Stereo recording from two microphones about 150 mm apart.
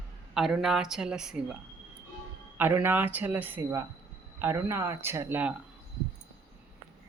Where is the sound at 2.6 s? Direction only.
15° right (ahead or behind).